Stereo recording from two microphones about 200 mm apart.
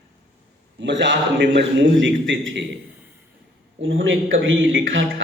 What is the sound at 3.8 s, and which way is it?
A man's voice, 70° right (ahead or behind).